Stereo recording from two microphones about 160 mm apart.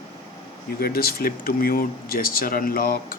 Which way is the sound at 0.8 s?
70° left (ahead or behind).